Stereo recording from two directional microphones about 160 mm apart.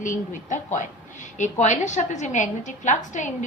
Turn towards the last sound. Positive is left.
turn(degrees=50)  # may be behind; listen again after turning